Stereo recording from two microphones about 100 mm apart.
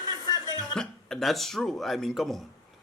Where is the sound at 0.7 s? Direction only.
5° left (ahead or behind).